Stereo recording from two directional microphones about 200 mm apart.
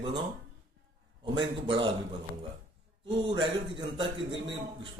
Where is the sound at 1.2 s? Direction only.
25° right (ahead or behind).